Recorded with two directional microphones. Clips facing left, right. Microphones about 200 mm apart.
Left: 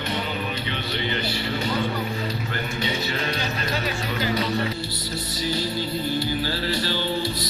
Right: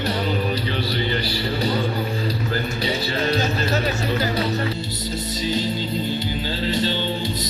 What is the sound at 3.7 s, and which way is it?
Music, 45° right (ahead or behind).